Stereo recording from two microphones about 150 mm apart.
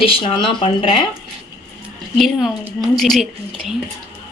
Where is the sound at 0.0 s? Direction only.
35° left (ahead or behind).